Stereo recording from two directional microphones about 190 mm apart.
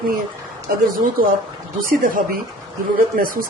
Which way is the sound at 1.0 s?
45° right (ahead or behind).